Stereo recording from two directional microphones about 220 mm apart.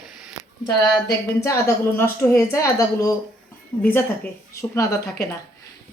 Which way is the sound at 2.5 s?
15° left (ahead or behind).